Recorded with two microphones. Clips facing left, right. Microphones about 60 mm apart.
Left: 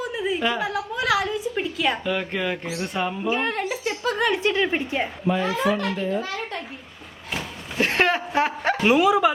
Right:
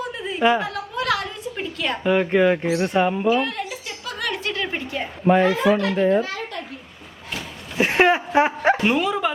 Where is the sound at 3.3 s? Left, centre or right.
Left.